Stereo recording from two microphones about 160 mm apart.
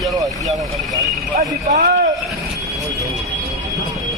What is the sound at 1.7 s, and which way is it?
Speech, 50° right (ahead or behind).